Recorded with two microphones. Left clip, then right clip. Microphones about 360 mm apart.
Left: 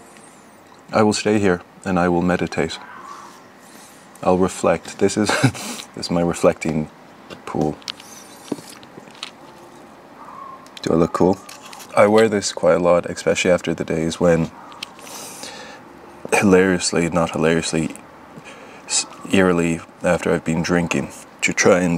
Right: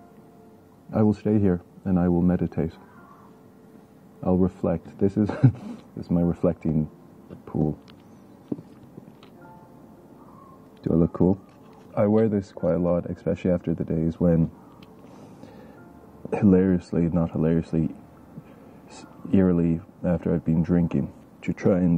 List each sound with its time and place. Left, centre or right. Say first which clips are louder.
0.9 s speech: left 7 dB; centre
4.2 s speech: left 8 dB; centre
7.2 s a sound: left 6 dB; centre
10.8 s speech: left 7 dB; centre